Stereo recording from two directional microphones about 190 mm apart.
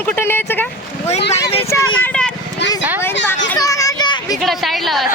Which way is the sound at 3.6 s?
20° left (ahead or behind).